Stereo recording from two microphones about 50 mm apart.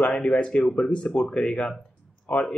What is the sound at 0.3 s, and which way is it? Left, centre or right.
A man's voice, left.